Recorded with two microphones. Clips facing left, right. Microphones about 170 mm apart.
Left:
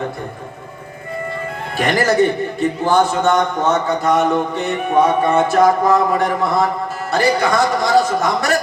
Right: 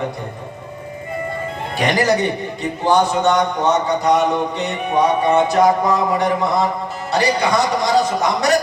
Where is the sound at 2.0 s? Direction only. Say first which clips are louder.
Left 4 dB; 50° left (ahead or behind).